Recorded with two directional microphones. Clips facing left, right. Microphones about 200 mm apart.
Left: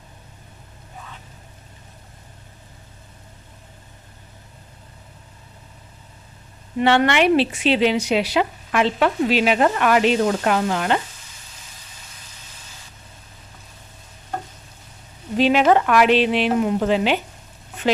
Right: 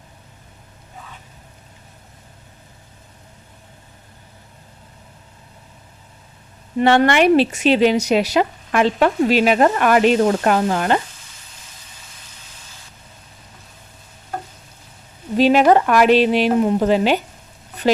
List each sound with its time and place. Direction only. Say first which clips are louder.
6.8 s speech: right 3 dB; 45° right (ahead or behind)
15.4 s speech: right 3 dB; 40° right (ahead or behind)